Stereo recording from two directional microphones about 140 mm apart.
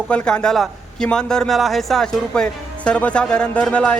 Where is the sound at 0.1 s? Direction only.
10° left (ahead or behind).